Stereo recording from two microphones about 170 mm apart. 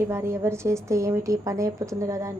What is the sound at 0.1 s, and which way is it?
A woman's voice, 15° right (ahead or behind).